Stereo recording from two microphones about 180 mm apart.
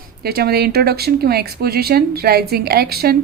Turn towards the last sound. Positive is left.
turn(degrees=-60)  # may be behind; listen again after turning